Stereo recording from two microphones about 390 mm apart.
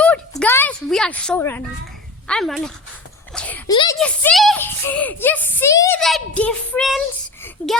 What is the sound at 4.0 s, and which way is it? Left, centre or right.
A child's voice, centre.